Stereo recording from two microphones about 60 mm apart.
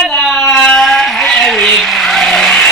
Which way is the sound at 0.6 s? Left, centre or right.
Centre.